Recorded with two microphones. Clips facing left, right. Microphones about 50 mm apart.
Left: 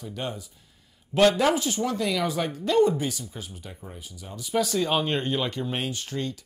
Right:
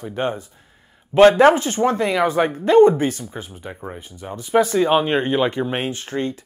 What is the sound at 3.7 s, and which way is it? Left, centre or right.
Speech, right.